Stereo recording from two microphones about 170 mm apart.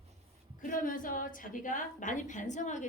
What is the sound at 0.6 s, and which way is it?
A woman's voice, 55° left (ahead or behind).